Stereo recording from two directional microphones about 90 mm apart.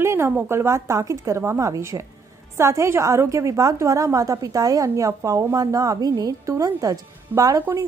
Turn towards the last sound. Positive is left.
turn(degrees=-40)  # may be behind; listen again after turning